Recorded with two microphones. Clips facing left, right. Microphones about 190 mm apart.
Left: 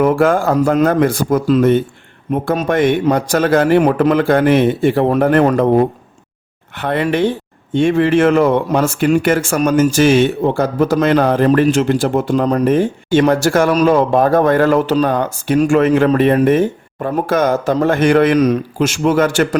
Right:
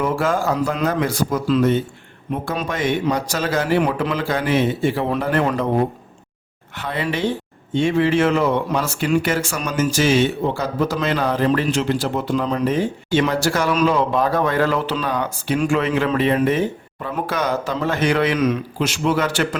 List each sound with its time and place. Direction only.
0.0 s a man's voice: 55° left (ahead or behind)